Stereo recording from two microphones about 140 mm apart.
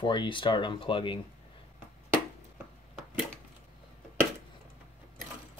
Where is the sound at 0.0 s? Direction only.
35° left (ahead or behind).